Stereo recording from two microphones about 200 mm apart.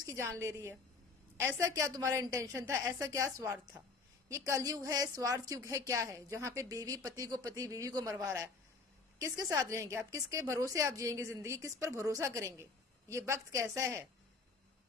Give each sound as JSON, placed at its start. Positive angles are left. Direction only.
{"t": 0.0, "sound": "a woman's voice", "side_deg": -15}